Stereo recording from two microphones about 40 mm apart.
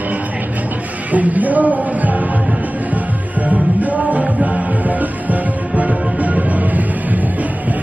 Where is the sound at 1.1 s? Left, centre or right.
Right.